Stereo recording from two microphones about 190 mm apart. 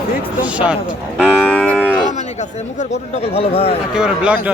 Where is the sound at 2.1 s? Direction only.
40° left (ahead or behind).